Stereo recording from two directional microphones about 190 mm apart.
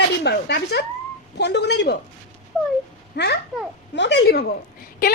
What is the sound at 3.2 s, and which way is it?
A woman's voice, 65° left (ahead or behind).